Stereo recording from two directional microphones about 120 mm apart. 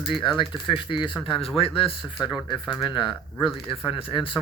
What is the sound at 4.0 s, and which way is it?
Speech, 45° left (ahead or behind).